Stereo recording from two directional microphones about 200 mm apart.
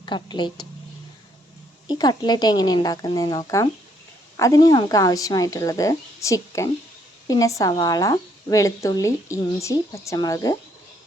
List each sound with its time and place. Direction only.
0.0 s speech: 25° left (ahead or behind)
1.9 s speech: 20° left (ahead or behind)